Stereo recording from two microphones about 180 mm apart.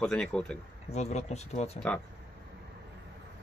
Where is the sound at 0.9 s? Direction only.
35° left (ahead or behind).